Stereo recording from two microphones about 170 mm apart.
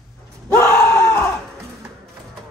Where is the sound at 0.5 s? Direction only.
15° left (ahead or behind).